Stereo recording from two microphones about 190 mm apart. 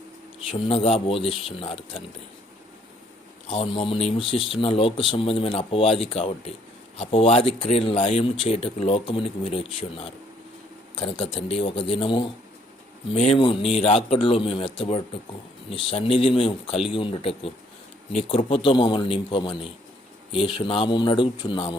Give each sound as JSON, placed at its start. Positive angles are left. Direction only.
{"t": 0.5, "sound": "speech", "side_deg": 30}
{"t": 3.5, "sound": "speech", "side_deg": 25}